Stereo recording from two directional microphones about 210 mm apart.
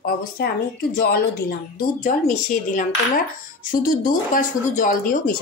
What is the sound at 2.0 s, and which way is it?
Speech, 40° left (ahead or behind).